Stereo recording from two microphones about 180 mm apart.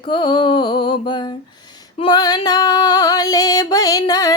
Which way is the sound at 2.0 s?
25° left (ahead or behind).